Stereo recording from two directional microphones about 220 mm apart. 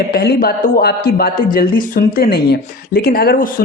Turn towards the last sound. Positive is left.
turn(degrees=45)  # may be behind; listen again after turning